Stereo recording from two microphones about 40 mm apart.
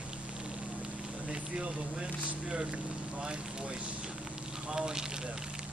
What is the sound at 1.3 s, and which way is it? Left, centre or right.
Speech, right.